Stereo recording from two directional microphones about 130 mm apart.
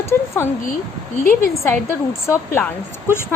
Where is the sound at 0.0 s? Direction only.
20° left (ahead or behind).